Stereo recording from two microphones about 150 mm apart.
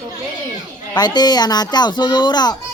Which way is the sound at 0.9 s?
30° left (ahead or behind).